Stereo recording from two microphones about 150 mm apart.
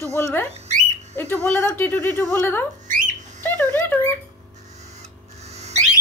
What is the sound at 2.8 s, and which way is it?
Squawk, 60° right (ahead or behind).